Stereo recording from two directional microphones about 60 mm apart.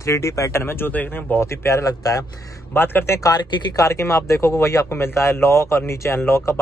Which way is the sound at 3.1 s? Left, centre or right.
Left.